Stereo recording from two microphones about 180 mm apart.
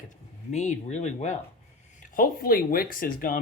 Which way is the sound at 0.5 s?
40° left (ahead or behind).